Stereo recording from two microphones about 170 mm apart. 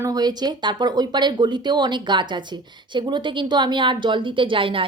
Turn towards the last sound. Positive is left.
turn(degrees=-30)  # may be behind; listen again after turning